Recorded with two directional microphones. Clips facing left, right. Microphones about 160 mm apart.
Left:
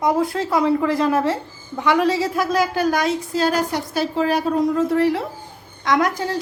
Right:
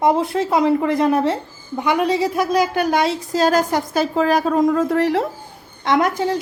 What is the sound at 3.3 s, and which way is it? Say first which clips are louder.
A woman's voice: right 6 dB; 45° right (ahead or behind).